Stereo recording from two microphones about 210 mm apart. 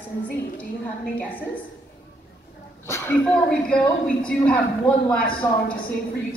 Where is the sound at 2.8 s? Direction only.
10° left (ahead or behind).